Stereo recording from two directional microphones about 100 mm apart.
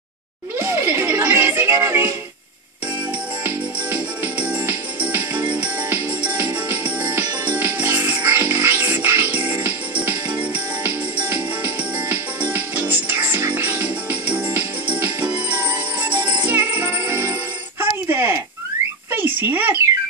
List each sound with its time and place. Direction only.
0.6 s music: 25° right (ahead or behind)
3.4 s music: 15° right (ahead or behind)
19.1 s a sound: 20° right (ahead or behind)